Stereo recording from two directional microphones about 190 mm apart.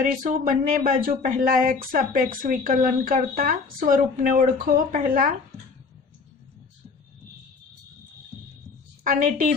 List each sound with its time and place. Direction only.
0.0 s speech: 45° right (ahead or behind)
9.0 s speech: 45° right (ahead or behind)